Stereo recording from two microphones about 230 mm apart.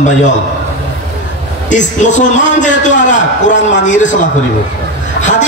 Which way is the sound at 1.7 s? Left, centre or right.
Left.